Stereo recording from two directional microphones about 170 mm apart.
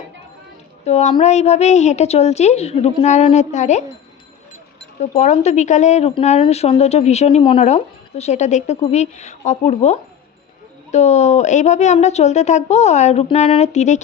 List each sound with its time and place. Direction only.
0.9 s a woman's voice: 40° left (ahead or behind)
4.9 s a woman's voice: 40° left (ahead or behind)